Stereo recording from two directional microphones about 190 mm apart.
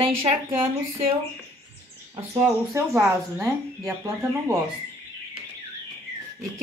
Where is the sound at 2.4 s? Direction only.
15° right (ahead or behind).